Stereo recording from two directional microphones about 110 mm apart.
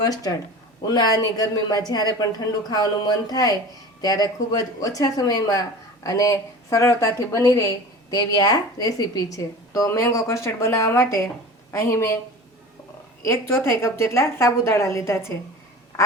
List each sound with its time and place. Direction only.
0.0 s a woman's voice: 35° left (ahead or behind)
13.2 s a woman's voice: 25° left (ahead or behind)